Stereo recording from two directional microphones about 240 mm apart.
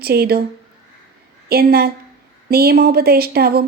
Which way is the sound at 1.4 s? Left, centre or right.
Right.